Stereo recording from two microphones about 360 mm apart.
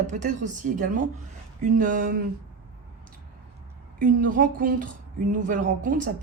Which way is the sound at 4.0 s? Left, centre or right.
Right.